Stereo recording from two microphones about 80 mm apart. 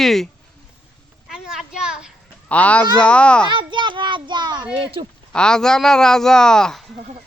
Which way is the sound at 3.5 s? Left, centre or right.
Right.